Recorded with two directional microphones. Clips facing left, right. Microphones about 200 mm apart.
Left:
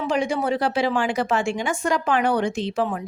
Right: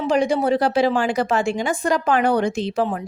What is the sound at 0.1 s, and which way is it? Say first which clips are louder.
A woman's voice: right 5 dB; 35° right (ahead or behind).